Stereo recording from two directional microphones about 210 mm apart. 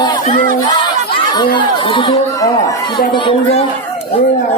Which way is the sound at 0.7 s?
20° left (ahead or behind).